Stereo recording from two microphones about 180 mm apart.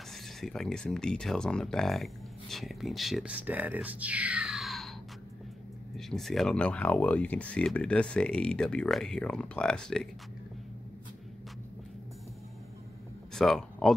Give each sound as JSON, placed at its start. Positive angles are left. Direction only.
{"t": 0.1, "sound": "speech", "side_deg": 0}
{"t": 5.9, "sound": "speech", "side_deg": 0}
{"t": 13.3, "sound": "speech", "side_deg": 0}